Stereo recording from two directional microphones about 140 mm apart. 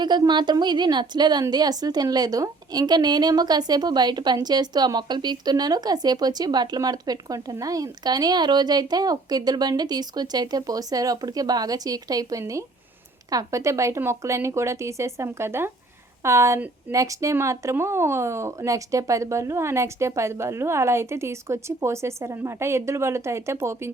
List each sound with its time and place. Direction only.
0.0 s a woman's voice: 30° right (ahead or behind)